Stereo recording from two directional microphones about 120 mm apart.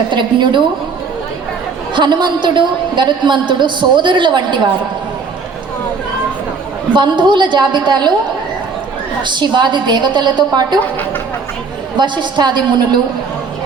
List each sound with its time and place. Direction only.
0.1 s a woman's voice: 40° right (ahead or behind)
2.0 s a woman's voice: 40° right (ahead or behind)
6.9 s a woman's voice: 40° right (ahead or behind)
9.2 s a woman's voice: 40° right (ahead or behind)
11.9 s a woman's voice: 40° right (ahead or behind)